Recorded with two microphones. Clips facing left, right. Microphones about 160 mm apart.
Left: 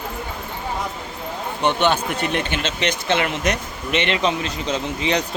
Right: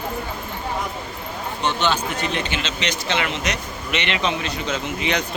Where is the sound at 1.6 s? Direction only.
55° left (ahead or behind); by 5.2 s 35° left (ahead or behind).